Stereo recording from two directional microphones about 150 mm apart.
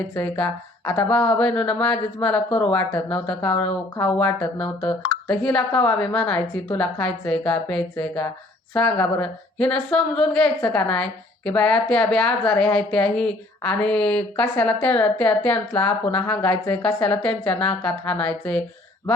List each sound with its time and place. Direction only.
0.1 s a woman's voice: 10° left (ahead or behind)